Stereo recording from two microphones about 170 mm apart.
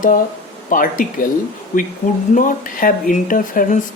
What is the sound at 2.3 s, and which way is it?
Speech, 50° left (ahead or behind).